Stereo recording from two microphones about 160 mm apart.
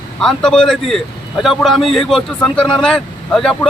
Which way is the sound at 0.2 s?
5° left (ahead or behind).